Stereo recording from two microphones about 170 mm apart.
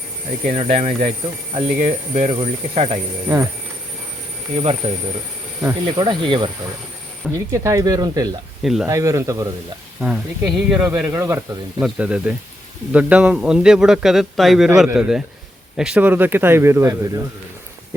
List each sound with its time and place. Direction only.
0.6 s speech: 35° right (ahead or behind)
3.2 s speech: 15° right (ahead or behind)
4.5 s speech: 35° right (ahead or behind)
5.6 s speech: 25° right (ahead or behind)
7.3 s speech: 20° right (ahead or behind)
8.6 s a man's voice: centre (ahead or behind)
8.9 s speech: 20° right (ahead or behind)
10.0 s a man's voice: 5° right (ahead or behind)